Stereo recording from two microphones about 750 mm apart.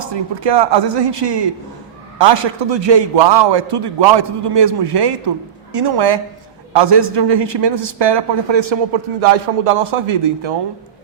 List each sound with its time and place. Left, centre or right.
0.1 s a man's voice: right